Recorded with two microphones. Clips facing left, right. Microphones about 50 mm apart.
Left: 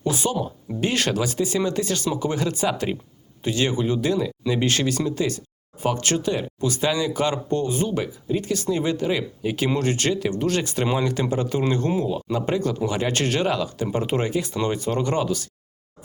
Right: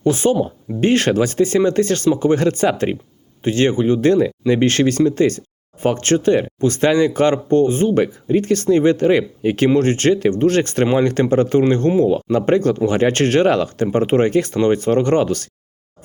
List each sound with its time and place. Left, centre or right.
0.0 s speech: right
13.8 s speech: right